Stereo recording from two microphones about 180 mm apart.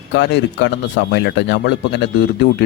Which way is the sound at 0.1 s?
80° left.